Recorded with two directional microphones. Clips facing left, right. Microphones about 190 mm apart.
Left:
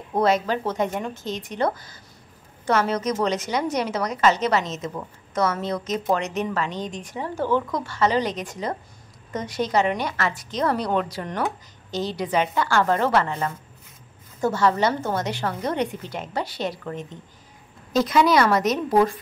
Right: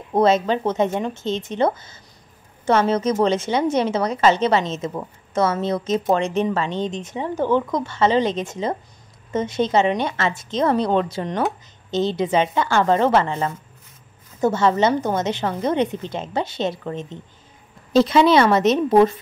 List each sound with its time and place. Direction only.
0.2 s a woman's voice: 20° right (ahead or behind)